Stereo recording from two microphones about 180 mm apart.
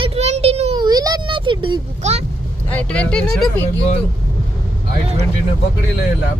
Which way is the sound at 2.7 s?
5° left (ahead or behind).